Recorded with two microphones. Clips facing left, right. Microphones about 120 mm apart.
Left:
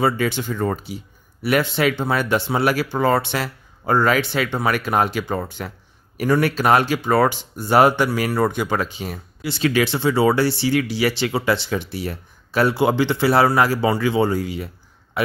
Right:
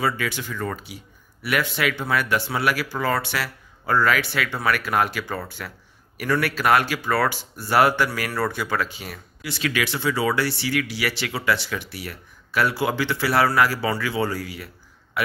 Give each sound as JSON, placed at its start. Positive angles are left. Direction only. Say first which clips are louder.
{"t": 0.0, "sound": "speech", "louder": "left 5 dB", "side_deg": 30}